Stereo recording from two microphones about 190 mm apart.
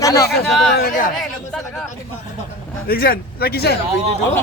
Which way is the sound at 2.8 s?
50° left (ahead or behind).